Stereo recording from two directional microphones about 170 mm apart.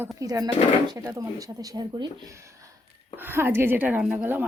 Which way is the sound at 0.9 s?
20° right (ahead or behind).